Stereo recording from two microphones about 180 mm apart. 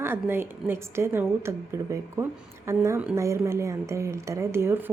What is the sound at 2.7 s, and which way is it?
A woman's voice, 15° right (ahead or behind).